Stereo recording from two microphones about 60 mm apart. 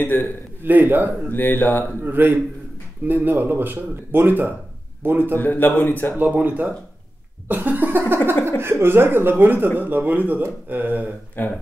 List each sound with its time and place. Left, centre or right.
0.0 s a man's voice: left
0.7 s speech: right
1.3 s a man's voice: left
2.0 s speech: right
5.4 s a man's voice: left
6.1 s speech: right
8.5 s speech: right
11.4 s a man's voice: left